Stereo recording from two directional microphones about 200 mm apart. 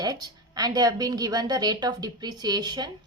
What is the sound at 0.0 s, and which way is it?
A woman's voice, 20° right (ahead or behind).